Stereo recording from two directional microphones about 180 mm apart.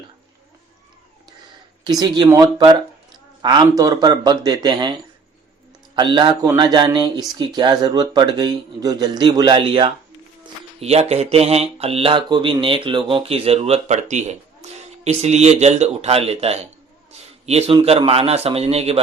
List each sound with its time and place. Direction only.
1.8 s speech: 20° right (ahead or behind)
6.0 s speech: 25° right (ahead or behind)
17.1 s a sound: 35° right (ahead or behind)
17.7 s speech: 30° right (ahead or behind)